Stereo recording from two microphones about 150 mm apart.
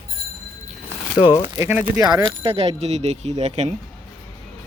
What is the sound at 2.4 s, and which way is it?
Speech, 40° right (ahead or behind).